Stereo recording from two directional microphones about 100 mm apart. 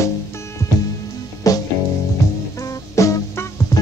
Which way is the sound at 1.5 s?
35° left (ahead or behind).